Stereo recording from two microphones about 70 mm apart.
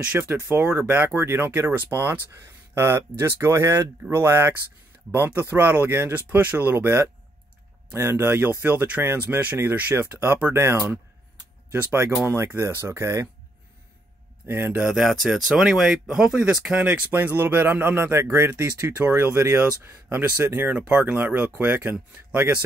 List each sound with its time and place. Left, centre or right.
0.0 s speech: right
14.4 s speech: right
15.0 s speech: centre
17.1 s speech: right
20.7 s speech: centre